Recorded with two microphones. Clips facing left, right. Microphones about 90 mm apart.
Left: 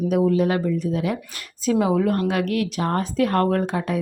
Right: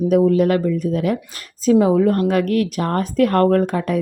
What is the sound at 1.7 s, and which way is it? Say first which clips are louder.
A woman's voice: right 5 dB; 35° right (ahead or behind).